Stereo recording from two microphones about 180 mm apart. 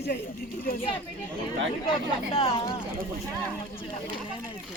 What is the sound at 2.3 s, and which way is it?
Speech, 30° left (ahead or behind).